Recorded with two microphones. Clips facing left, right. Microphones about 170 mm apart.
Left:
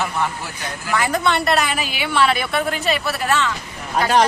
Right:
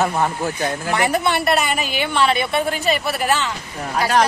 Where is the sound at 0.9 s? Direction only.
25° right (ahead or behind).